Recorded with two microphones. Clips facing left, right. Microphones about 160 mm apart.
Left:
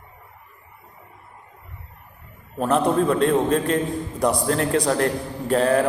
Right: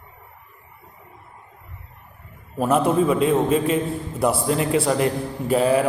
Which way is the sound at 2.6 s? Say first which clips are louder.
Right 1 dB; 5° right (ahead or behind).